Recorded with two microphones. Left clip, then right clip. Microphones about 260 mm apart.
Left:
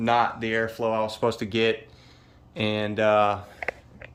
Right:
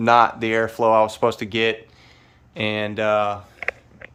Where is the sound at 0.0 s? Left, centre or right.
Centre.